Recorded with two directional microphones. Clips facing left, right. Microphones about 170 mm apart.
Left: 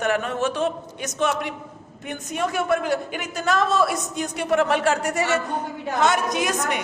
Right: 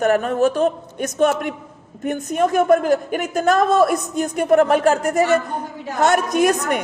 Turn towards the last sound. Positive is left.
turn(degrees=-55)  # may be behind; listen again after turning